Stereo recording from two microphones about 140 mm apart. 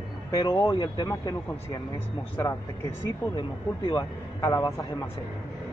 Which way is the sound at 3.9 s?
30° left (ahead or behind).